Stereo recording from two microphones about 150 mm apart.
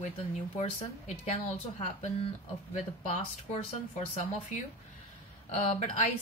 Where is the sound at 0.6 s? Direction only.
50° left (ahead or behind).